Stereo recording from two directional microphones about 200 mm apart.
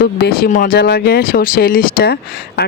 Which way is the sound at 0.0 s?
50° left (ahead or behind).